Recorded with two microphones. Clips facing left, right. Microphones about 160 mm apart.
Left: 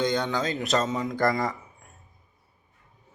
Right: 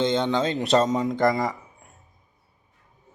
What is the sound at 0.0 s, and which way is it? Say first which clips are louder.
Speech: right 3 dB; 25° right (ahead or behind).